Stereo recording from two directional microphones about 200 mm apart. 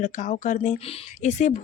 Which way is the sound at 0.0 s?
40° left (ahead or behind).